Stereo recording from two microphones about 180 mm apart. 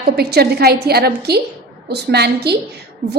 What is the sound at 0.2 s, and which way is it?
A woman's voice, 60° right (ahead or behind).